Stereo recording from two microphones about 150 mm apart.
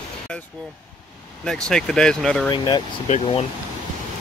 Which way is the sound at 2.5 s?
30° left (ahead or behind).